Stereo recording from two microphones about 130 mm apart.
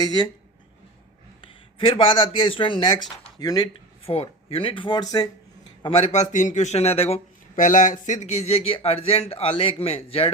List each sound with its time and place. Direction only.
0.0 s speech: 30° left (ahead or behind)
1.4 s a sound: 40° left (ahead or behind)
2.2 s speech: 40° left (ahead or behind)
4.0 s speech: 50° left (ahead or behind); by 5.3 s 30° left (ahead or behind)
5.8 s speech: 45° left (ahead or behind)
6.1 s speech: 65° left (ahead or behind); by 7.2 s 50° left (ahead or behind)
7.5 s speech: 80° left; by 10.3 s 45° left (ahead or behind)